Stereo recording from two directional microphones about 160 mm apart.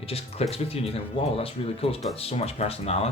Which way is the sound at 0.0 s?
40° left (ahead or behind).